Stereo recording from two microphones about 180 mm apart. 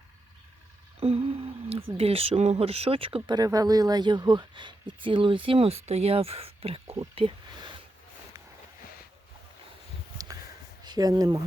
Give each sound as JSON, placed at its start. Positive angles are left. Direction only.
{"t": 0.9, "sound": "speech", "side_deg": -35}
{"t": 3.2, "sound": "speech", "side_deg": -20}
{"t": 10.8, "sound": "speech", "side_deg": -20}